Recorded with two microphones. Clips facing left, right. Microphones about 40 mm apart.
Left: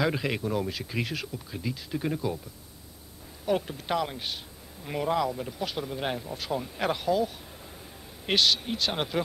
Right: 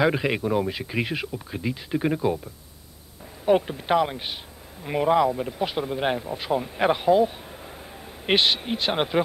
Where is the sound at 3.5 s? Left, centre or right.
Right.